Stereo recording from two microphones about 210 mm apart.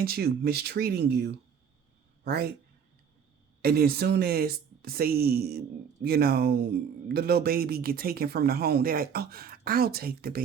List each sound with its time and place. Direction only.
0.0 s speech: 45° right (ahead or behind)
3.6 s speech: 45° right (ahead or behind)